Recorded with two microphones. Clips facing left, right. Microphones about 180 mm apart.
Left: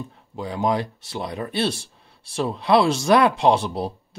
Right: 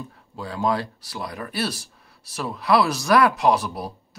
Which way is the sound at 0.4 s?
20° left (ahead or behind).